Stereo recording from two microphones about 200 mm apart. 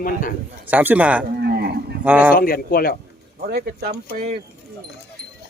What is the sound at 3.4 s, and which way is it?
Cattle, 55° right (ahead or behind).